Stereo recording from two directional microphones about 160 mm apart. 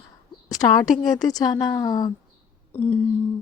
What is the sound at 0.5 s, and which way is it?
Speech, 25° left (ahead or behind).